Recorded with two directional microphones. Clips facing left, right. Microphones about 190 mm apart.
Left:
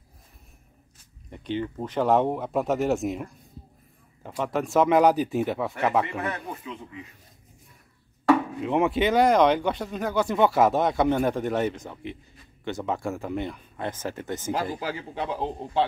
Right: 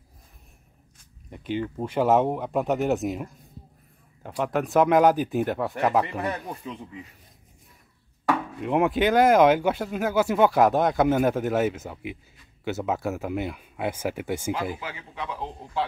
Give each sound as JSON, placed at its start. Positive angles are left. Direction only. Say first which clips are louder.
{"t": 1.3, "sound": "speech", "louder": "right 1 dB", "side_deg": -5}
{"t": 8.5, "sound": "speech", "louder": "right 1 dB", "side_deg": 0}
{"t": 14.8, "sound": "a man's voice", "louder": "left 5 dB", "side_deg": 35}